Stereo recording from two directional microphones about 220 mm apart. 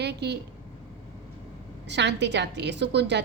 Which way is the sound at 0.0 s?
50° right (ahead or behind).